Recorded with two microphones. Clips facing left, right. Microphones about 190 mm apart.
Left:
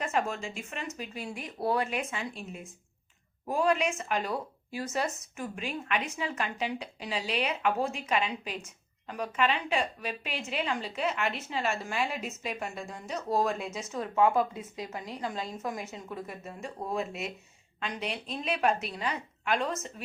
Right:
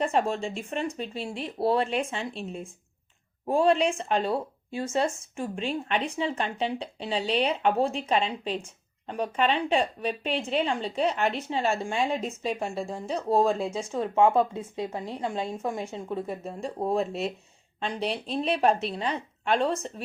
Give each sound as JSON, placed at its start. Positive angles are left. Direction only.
{"t": 0.0, "sound": "a woman's voice", "side_deg": -30}